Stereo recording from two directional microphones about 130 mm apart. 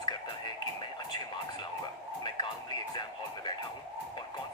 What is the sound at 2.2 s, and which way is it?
Music, 35° left (ahead or behind).